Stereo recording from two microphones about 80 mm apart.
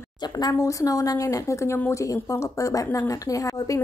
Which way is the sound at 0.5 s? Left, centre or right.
Left.